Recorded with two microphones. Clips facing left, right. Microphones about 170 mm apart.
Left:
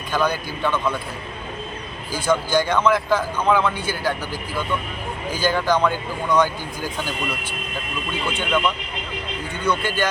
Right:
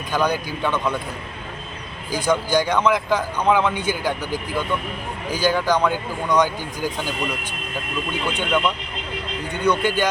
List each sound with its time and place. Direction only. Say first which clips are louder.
0.1 s speech: right 1 dB; 15° right (ahead or behind)
2.1 s speech: even; 15° right (ahead or behind)
8.3 s speech: even; 15° right (ahead or behind)